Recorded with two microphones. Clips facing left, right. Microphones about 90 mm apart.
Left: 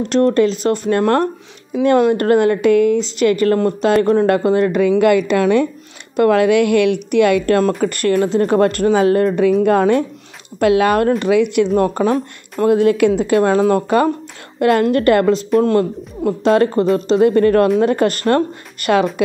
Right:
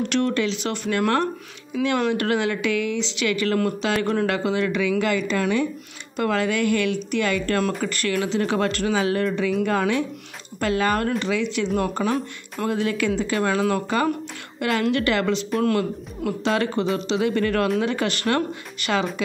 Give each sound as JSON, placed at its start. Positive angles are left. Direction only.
{"t": 0.0, "sound": "a woman's voice", "side_deg": 35}
{"t": 10.6, "sound": "a woman's voice", "side_deg": 60}
{"t": 12.0, "sound": "speech", "side_deg": 40}
{"t": 12.6, "sound": "speech", "side_deg": 55}
{"t": 16.4, "sound": "speech", "side_deg": 45}